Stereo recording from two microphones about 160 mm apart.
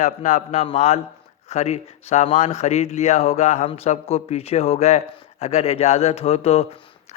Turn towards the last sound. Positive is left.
turn(degrees=40)  # may be behind; listen again after turning